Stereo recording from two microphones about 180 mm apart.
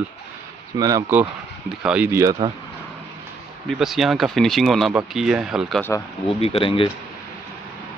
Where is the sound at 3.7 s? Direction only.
Centre (ahead or behind).